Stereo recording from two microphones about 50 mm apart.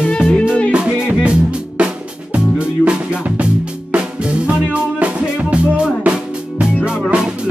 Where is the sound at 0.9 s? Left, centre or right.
Right.